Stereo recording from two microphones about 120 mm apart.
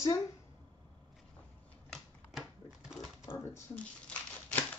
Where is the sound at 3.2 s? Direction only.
20° left (ahead or behind).